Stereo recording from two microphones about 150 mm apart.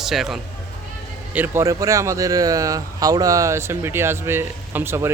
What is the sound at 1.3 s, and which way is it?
Speech, 15° right (ahead or behind).